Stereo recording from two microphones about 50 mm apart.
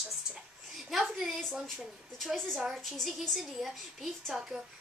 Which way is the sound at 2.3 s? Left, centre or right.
Centre.